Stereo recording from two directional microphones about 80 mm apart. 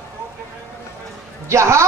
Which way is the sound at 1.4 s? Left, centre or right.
Right.